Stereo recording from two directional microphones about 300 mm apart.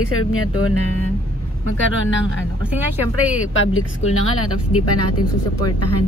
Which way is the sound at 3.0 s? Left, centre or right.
Left.